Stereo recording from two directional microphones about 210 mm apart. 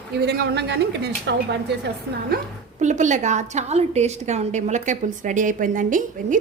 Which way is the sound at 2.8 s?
35° right (ahead or behind).